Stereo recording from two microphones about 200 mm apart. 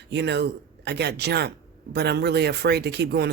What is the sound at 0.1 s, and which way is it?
Speech, 60° right (ahead or behind).